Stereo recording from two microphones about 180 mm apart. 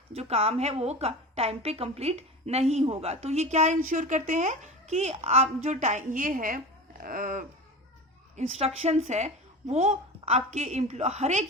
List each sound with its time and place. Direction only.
0.1 s a woman's voice: 35° right (ahead or behind)
7.0 s a sound: 50° right (ahead or behind)
8.4 s a woman's voice: 35° right (ahead or behind)